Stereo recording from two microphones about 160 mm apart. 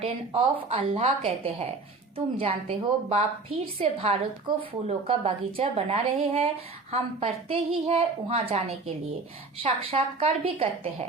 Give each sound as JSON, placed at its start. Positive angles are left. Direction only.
{"t": 0.0, "sound": "a woman's voice", "side_deg": -35}
{"t": 9.6, "sound": "a woman's voice", "side_deg": -35}